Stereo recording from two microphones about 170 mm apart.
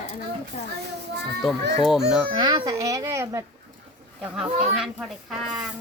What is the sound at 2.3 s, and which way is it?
Speech, 25° right (ahead or behind).